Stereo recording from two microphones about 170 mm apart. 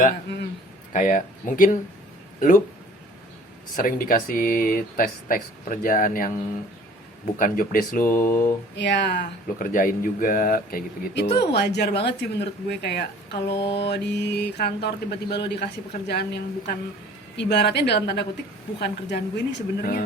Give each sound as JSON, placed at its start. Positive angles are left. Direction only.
{"t": 0.9, "sound": "speech", "side_deg": 50}
{"t": 3.8, "sound": "speech", "side_deg": 55}
{"t": 7.3, "sound": "speech", "side_deg": 55}
{"t": 8.0, "sound": "mantra", "side_deg": 15}
{"t": 8.7, "sound": "speech", "side_deg": 90}
{"t": 9.6, "sound": "speech", "side_deg": 55}
{"t": 13.5, "sound": "mantra", "side_deg": 30}
{"t": 13.7, "sound": "speech", "side_deg": 90}